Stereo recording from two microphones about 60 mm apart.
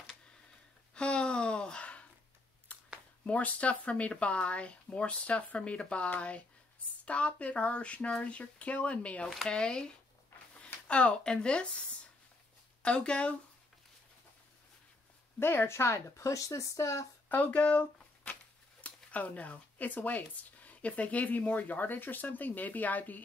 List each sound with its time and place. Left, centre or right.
0.9 s a sound: centre
3.3 s speech: left
15.3 s speech: left
17.3 s speech: left